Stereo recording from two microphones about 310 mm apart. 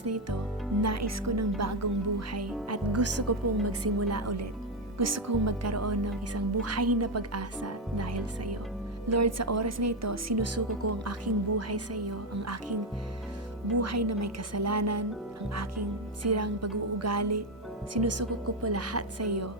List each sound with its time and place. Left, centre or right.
0.0 s a woman's voice: right
13.7 s speech: right
16.2 s a woman's voice: right